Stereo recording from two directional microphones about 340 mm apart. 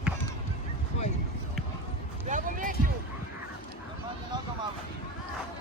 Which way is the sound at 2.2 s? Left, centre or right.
Right.